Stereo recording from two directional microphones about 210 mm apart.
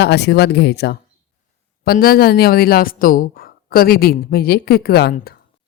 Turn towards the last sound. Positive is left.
turn(degrees=50)  # may be behind; listen again after turning